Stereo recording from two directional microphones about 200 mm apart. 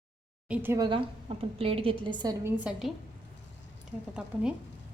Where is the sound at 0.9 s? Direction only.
25° right (ahead or behind).